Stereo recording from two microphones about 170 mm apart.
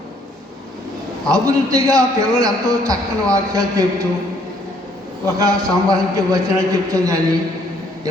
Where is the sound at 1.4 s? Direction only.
20° right (ahead or behind).